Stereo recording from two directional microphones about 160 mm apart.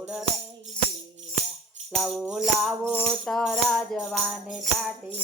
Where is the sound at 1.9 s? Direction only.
Centre (ahead or behind).